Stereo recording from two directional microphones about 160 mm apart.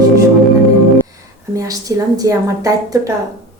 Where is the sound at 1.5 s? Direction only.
20° right (ahead or behind).